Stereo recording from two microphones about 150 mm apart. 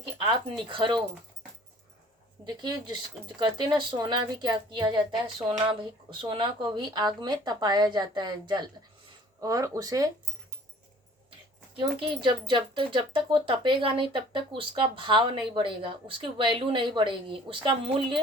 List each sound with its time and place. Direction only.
0.7 s speech: 30° right (ahead or behind)
2.4 s speech: 30° right (ahead or behind)
11.8 s speech: 35° right (ahead or behind)